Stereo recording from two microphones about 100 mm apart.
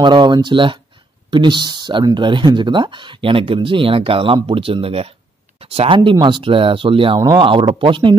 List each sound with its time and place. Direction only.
0.0 s speech: 45° right (ahead or behind); by 5.9 s 75° right (ahead or behind)
5.9 s speech: 50° right (ahead or behind)